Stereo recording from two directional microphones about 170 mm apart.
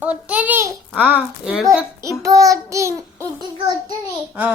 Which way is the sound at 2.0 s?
20° right (ahead or behind).